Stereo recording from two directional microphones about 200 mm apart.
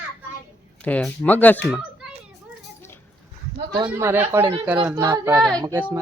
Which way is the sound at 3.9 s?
10° right (ahead or behind).